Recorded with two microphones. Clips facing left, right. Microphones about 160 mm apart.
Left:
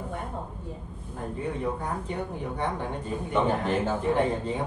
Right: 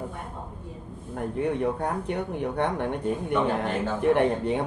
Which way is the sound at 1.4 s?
65° right (ahead or behind).